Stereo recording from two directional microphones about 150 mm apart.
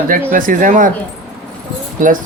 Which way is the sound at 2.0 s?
60° right (ahead or behind).